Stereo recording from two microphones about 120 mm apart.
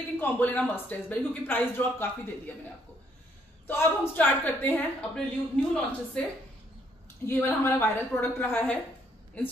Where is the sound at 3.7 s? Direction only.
15° left (ahead or behind).